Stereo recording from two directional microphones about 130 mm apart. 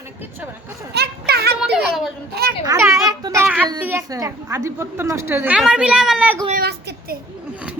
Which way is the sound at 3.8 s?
20° right (ahead or behind).